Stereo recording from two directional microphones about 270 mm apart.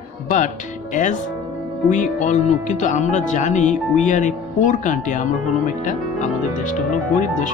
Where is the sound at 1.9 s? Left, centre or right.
Left.